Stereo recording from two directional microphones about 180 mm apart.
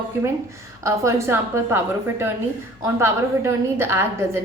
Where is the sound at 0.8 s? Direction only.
15° right (ahead or behind).